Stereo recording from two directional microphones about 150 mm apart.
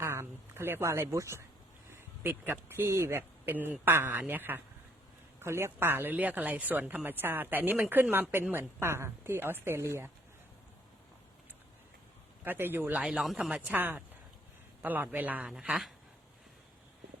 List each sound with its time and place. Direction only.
0.0 s speech: 15° right (ahead or behind)
12.5 s speech: 15° right (ahead or behind)